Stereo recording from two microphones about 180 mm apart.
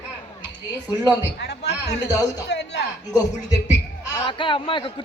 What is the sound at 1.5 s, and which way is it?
Speech, 70° left (ahead or behind).